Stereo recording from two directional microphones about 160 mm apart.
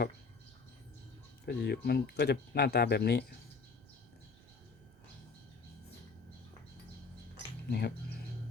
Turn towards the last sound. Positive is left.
turn(degrees=85)